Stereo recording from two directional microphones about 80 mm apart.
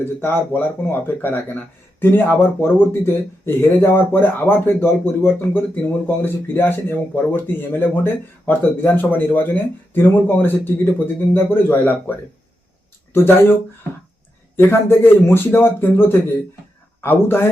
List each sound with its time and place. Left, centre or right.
0.0 s speech: left
13.1 s speech: left